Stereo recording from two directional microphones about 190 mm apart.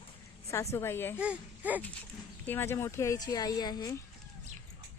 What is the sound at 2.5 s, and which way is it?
Speech, 10° left (ahead or behind).